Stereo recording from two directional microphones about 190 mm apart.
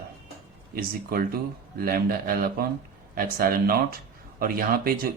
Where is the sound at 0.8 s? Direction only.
50° right (ahead or behind).